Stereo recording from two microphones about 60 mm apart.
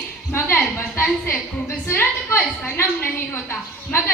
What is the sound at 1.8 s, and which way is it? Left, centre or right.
A woman's voice, left.